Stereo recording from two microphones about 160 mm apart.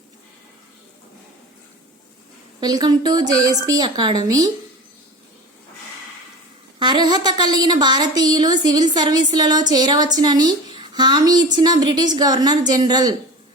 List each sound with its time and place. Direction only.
2.6 s a woman's voice: 25° right (ahead or behind)
6.7 s a woman's voice: 30° right (ahead or behind)